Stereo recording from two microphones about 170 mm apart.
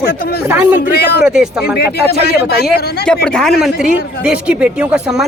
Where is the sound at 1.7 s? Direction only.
70° left (ahead or behind).